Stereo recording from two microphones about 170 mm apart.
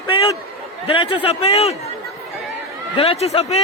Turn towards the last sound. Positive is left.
turn(degrees=35)  # may be behind; listen again after turning